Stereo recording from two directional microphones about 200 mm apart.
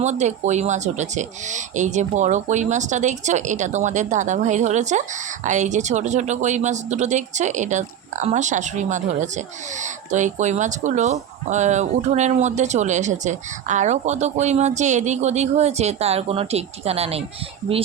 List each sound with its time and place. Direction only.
0.0 s speech: 35° right (ahead or behind)